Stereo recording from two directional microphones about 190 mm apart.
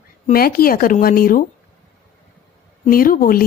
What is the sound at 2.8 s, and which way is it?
Speech, 50° left (ahead or behind).